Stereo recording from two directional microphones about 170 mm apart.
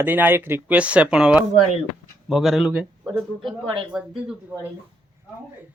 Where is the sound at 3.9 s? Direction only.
5° right (ahead or behind).